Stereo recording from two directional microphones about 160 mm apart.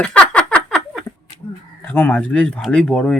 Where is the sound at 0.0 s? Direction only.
5° left (ahead or behind).